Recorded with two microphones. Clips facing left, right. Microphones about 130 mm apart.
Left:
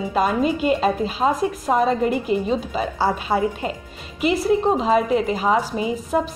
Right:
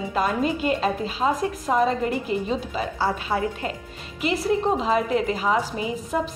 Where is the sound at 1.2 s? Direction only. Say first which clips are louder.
Left 3 dB; 35° left (ahead or behind).